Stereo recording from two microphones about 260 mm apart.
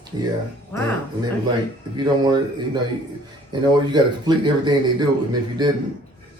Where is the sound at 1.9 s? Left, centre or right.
Centre.